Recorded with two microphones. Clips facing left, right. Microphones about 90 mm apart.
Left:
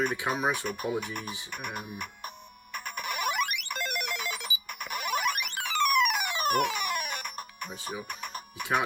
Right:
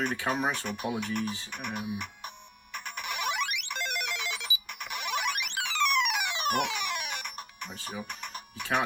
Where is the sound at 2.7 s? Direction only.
50° left (ahead or behind).